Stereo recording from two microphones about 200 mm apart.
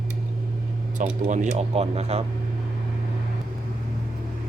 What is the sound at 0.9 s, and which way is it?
Speech, 40° right (ahead or behind).